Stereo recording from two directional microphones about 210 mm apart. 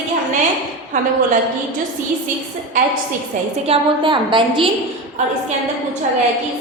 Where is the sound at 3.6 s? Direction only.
25° right (ahead or behind).